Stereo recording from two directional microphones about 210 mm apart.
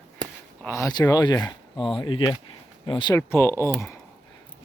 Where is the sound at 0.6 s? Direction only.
15° left (ahead or behind).